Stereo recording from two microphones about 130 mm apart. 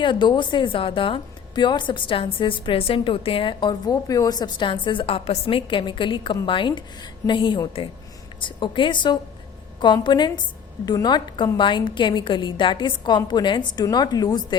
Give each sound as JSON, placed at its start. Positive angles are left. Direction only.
{"t": 0.0, "sound": "a woman's voice", "side_deg": 35}